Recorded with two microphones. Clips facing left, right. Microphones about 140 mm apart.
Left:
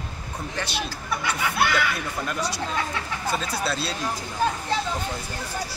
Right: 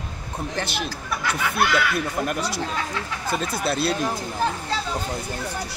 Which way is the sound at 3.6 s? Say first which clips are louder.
Right 4 dB; 60° right (ahead or behind).